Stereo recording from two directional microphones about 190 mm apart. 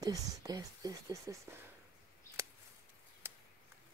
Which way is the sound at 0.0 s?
20° right (ahead or behind).